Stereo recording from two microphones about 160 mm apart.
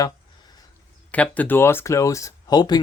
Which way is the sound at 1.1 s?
10° left (ahead or behind).